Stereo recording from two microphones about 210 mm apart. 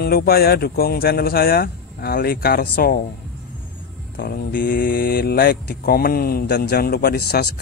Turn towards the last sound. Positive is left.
turn(degrees=50)  # may be behind; listen again after turning